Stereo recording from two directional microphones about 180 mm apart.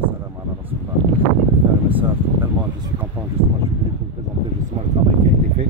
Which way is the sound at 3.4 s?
30° right (ahead or behind).